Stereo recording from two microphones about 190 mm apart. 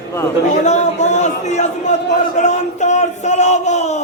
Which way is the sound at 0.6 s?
40° left (ahead or behind).